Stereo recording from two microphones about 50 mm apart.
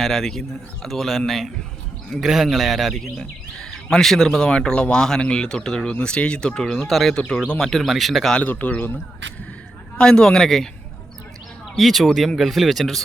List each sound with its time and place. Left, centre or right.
0.0 s speech: centre
2.2 s speech: centre
3.2 s speech: centre
8.4 s speech: left
10.0 s speech: centre
11.8 s speech: centre